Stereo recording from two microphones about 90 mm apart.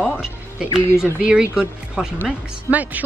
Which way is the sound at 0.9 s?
10° right (ahead or behind).